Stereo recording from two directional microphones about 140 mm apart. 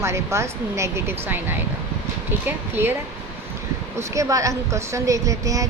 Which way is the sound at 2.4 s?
15° right (ahead or behind).